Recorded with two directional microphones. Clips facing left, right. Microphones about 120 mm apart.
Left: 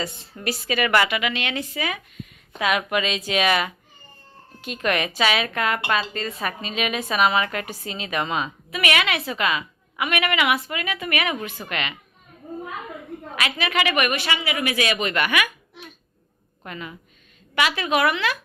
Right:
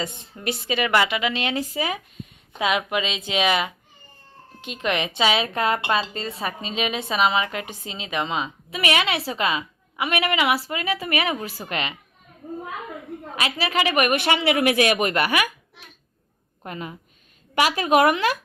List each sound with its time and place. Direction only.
0.0 s a woman's voice: 20° right (ahead or behind)
2.6 s a woman's voice: 20° right (ahead or behind)
13.3 s a woman's voice: 30° right (ahead or behind)
14.2 s a woman's voice: 60° right (ahead or behind); by 15.5 s 35° right (ahead or behind)
16.6 s a woman's voice: 40° right (ahead or behind)